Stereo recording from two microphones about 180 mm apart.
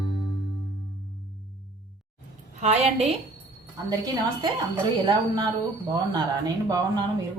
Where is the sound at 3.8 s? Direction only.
20° right (ahead or behind).